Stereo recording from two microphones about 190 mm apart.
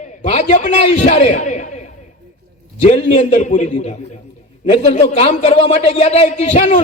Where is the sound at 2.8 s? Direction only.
35° left (ahead or behind).